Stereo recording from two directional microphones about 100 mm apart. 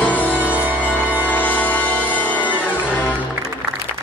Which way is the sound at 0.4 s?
15° right (ahead or behind).